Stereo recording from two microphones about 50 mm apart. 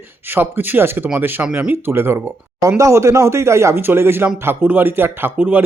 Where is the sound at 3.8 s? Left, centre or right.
Right.